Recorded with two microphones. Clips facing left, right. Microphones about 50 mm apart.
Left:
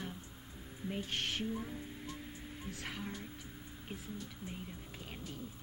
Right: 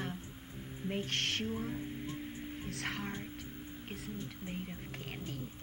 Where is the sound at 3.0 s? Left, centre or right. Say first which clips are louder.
Right 3 dB; right.